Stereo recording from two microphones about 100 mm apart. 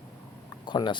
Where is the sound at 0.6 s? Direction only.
50° left (ahead or behind).